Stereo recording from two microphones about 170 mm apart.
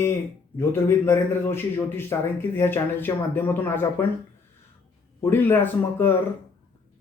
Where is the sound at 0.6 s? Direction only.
15° left (ahead or behind).